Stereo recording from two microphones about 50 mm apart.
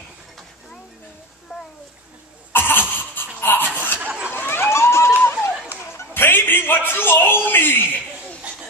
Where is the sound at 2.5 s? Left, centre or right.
Left.